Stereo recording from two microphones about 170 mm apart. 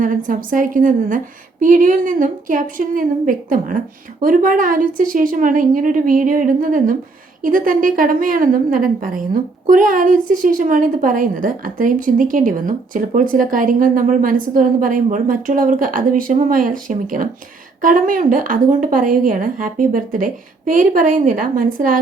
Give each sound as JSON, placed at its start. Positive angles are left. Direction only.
{"t": 0.0, "sound": "a woman's voice", "side_deg": -50}